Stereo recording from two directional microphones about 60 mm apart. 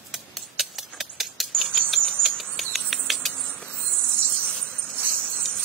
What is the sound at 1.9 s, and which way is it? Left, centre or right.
Cricket, centre.